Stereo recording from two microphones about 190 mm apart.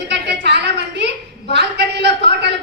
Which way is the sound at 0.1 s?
65° right (ahead or behind).